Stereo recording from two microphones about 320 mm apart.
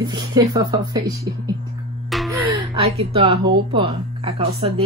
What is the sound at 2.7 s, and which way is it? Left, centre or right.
A woman's voice, centre.